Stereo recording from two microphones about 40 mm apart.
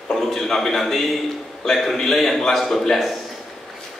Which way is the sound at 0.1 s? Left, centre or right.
Centre.